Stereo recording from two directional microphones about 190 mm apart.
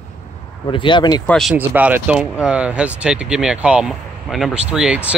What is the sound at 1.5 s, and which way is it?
Speech, 10° right (ahead or behind).